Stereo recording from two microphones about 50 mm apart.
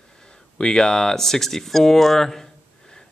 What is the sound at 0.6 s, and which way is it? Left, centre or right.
Speech, centre.